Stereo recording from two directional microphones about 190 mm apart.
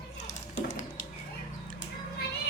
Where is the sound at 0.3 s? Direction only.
40° left (ahead or behind).